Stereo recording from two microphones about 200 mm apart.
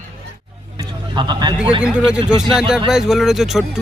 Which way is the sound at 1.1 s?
20° right (ahead or behind).